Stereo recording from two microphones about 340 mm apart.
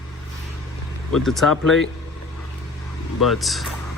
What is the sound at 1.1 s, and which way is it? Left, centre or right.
Speech, centre.